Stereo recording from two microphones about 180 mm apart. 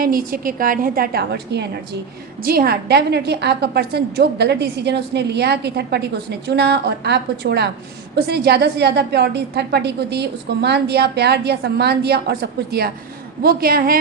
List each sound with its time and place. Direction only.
0.0 s a woman's voice: 55° right (ahead or behind)